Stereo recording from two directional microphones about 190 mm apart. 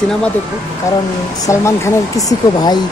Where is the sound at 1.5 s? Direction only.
15° left (ahead or behind).